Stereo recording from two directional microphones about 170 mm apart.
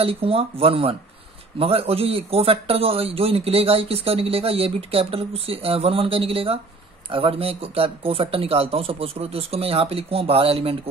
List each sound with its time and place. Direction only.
0.0 s a man's voice: 35° right (ahead or behind)